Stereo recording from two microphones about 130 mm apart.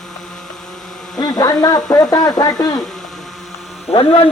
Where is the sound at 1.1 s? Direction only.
30° left (ahead or behind).